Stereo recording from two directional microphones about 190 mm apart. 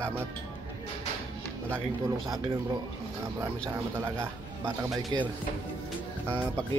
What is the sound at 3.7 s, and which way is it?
A man's voice, 10° right (ahead or behind).